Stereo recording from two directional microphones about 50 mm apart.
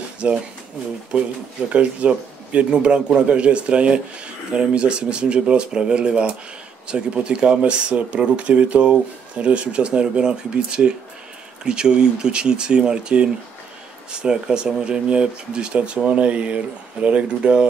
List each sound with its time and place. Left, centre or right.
0.2 s speech: right
1.7 s speech: right